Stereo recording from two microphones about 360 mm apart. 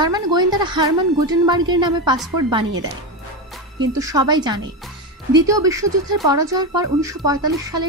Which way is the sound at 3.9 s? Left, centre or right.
Centre.